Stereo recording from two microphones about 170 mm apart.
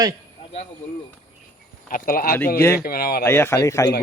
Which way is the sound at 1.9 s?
55° left (ahead or behind).